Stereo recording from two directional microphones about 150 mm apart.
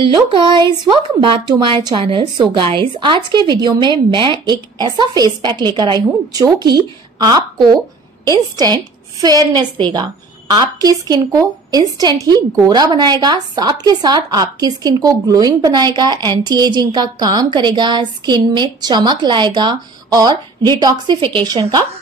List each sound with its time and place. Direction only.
0.0 s a woman's voice: 35° right (ahead or behind)